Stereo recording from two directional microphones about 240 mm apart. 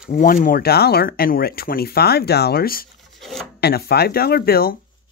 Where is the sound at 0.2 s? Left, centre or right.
Left.